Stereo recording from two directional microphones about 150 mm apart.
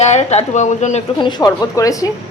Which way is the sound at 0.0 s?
45° left (ahead or behind).